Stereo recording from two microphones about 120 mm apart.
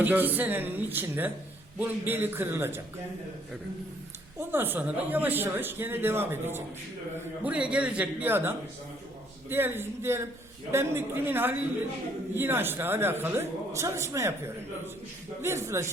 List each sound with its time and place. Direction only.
0.0 s speech: 15° right (ahead or behind)
4.4 s a man's voice: 20° right (ahead or behind)